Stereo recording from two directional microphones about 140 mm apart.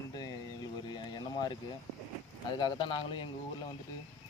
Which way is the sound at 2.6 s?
35° left (ahead or behind).